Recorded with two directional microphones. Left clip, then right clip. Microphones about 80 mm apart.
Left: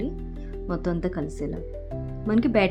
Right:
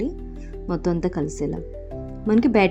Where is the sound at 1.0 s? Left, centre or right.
Right.